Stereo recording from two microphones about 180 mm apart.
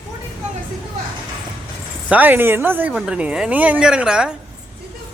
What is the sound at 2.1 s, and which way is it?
A woman's voice, 10° right (ahead or behind).